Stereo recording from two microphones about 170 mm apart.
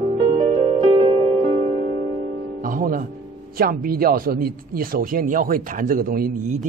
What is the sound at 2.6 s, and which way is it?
Music, 55° right (ahead or behind).